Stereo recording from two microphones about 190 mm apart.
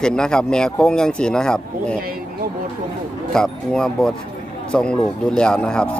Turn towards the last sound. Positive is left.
turn(degrees=5)  # may be behind; listen again after turning